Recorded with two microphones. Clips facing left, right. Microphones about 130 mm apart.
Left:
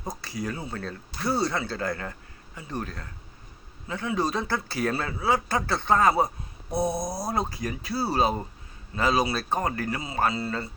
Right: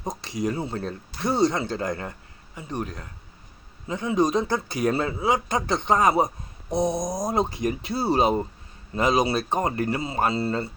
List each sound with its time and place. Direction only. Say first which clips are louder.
0.0 s speech: right 5 dB; 20° right (ahead or behind)